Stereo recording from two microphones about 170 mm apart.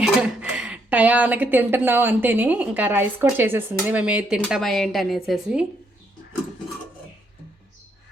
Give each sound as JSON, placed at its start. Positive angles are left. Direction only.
{"t": 0.0, "sound": "speech", "side_deg": -5}